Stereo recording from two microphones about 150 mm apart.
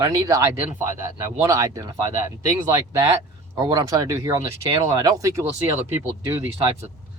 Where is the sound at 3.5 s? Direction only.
25° right (ahead or behind).